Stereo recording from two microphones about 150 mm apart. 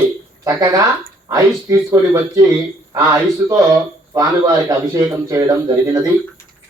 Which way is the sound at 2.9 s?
20° right (ahead or behind).